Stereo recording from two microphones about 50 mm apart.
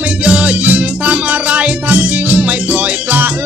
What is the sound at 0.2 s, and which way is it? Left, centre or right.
Music, right.